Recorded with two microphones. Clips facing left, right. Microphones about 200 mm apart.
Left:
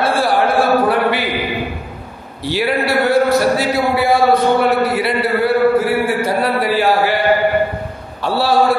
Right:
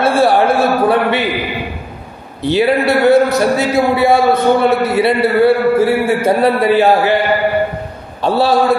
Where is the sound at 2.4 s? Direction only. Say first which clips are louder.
Right 5 dB; 20° right (ahead or behind).